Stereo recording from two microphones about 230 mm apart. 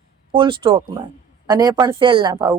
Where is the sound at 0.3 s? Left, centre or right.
Right.